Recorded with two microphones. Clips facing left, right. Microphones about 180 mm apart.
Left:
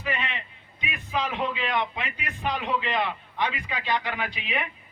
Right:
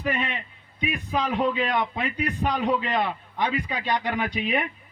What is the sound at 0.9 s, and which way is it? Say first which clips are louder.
A man's voice: right 3 dB; 35° right (ahead or behind).